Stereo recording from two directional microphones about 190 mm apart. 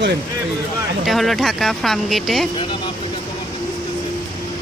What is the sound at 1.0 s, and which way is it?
Speech, centre (ahead or behind).